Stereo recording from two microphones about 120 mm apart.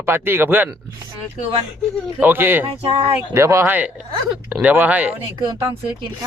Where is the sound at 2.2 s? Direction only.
20° right (ahead or behind).